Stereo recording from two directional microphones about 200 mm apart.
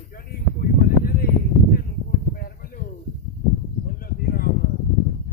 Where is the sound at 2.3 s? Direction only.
50° left (ahead or behind).